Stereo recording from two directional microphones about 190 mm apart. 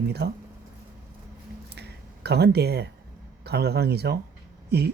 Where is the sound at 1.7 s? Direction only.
60° right (ahead or behind).